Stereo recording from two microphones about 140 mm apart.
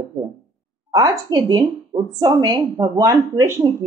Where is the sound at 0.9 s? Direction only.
25° right (ahead or behind).